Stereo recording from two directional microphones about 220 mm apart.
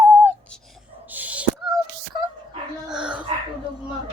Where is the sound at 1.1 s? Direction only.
5° right (ahead or behind).